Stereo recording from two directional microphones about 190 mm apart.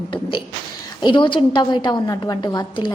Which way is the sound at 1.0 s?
25° left (ahead or behind).